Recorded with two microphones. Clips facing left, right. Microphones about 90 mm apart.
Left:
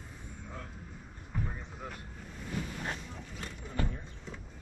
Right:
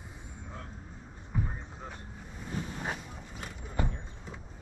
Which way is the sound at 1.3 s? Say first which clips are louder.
Right 3 dB; 10° right (ahead or behind).